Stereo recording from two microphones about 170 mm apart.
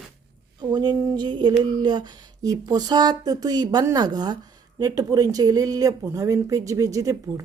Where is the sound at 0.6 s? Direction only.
25° right (ahead or behind).